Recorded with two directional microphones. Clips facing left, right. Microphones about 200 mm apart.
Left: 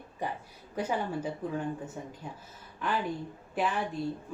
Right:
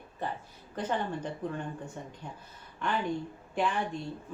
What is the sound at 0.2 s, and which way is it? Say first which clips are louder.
A woman's voice: left 1 dB; 10° left (ahead or behind).